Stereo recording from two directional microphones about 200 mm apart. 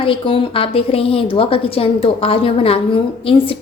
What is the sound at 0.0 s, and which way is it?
A woman's voice, 25° left (ahead or behind).